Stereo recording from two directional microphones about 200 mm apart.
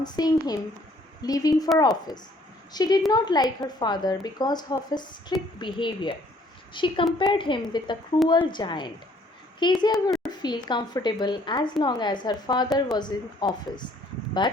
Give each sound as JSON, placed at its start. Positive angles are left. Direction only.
{"t": 0.0, "sound": "a woman's voice", "side_deg": 20}